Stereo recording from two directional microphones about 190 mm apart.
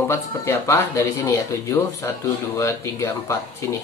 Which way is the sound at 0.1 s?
15° left (ahead or behind).